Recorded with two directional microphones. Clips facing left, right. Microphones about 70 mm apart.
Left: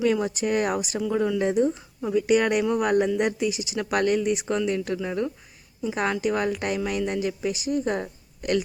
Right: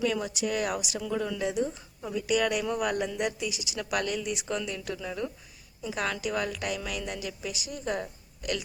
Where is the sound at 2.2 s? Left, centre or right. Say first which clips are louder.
Left 6 dB; left.